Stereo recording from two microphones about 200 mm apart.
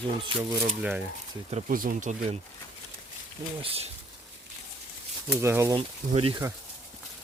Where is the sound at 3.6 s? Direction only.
30° right (ahead or behind).